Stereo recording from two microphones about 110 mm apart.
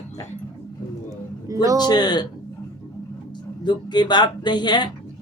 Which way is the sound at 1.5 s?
30° right (ahead or behind).